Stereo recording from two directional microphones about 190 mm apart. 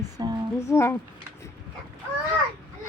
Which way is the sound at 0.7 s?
15° left (ahead or behind).